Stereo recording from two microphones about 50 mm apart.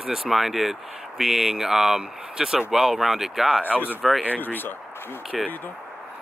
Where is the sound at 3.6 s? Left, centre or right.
Left.